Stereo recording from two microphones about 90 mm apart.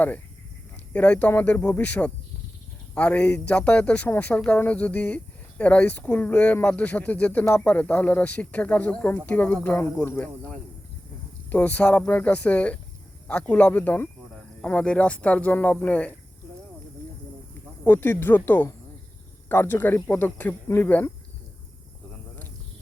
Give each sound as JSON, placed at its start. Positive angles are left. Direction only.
{"t": 0.9, "sound": "speech", "side_deg": 15}
{"t": 11.4, "sound": "speech", "side_deg": 20}
{"t": 17.8, "sound": "speech", "side_deg": 20}